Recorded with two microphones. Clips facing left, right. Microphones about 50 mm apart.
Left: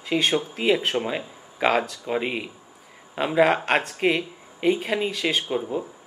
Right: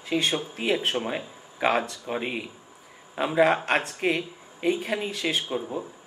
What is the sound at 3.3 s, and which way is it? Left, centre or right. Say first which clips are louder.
Speech: left 2 dB; left.